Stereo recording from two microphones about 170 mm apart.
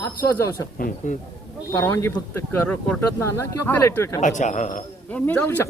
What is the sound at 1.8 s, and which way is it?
Speech, 15° left (ahead or behind).